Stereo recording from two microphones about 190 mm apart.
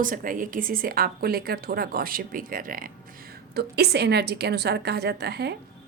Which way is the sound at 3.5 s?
55° right (ahead or behind).